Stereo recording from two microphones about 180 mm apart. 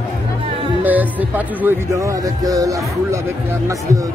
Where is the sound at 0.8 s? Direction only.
10° right (ahead or behind).